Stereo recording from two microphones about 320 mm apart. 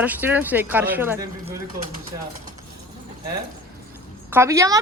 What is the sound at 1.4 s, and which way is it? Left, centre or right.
Speech, right.